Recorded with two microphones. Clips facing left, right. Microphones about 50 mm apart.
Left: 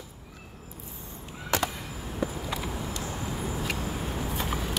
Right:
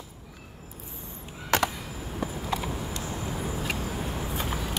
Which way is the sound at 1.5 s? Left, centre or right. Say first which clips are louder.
Right 3 dB; right.